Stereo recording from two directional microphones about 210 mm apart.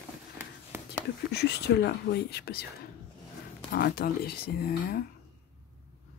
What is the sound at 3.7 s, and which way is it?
Speech, 45° left (ahead or behind).